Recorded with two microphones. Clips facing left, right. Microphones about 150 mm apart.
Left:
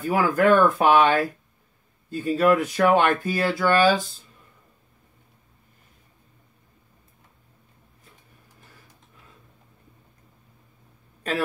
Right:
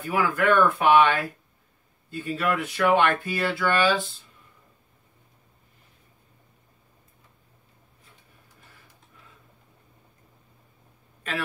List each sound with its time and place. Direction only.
0.1 s speech: 40° left (ahead or behind)
11.3 s speech: 40° left (ahead or behind)